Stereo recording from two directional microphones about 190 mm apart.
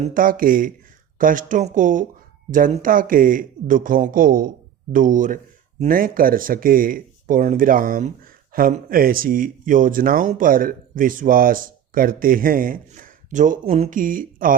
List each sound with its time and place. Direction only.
0.0 s speech: 45° right (ahead or behind)